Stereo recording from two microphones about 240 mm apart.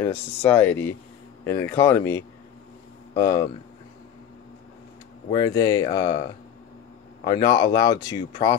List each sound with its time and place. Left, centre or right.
0.0 s speech: centre
5.3 s speech: centre
7.2 s speech: centre